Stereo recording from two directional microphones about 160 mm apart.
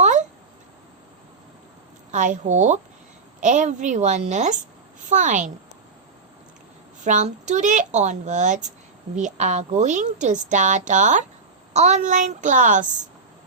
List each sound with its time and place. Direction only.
0.0 s a sound: 50° right (ahead or behind)
2.1 s a woman's voice: 50° right (ahead or behind)
7.0 s a woman's voice: 50° right (ahead or behind)